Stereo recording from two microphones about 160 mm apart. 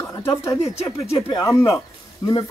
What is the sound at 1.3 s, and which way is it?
Speech, 20° left (ahead or behind).